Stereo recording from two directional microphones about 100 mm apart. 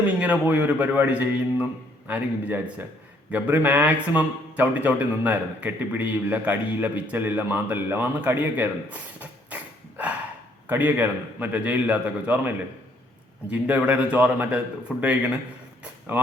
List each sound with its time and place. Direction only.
0.0 s a man's voice: 15° right (ahead or behind)
10.7 s a man's voice: 20° right (ahead or behind)
15.8 s a sound: 20° right (ahead or behind)